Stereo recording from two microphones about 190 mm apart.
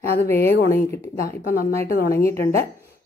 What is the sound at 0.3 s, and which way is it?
Speech, 15° left (ahead or behind).